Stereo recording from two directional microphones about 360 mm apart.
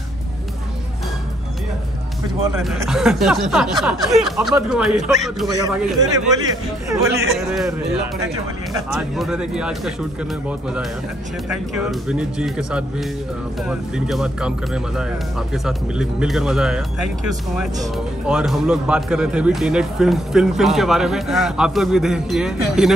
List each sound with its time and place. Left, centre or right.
2.4 s speech: centre
11.5 s speech: centre
17.9 s speech: centre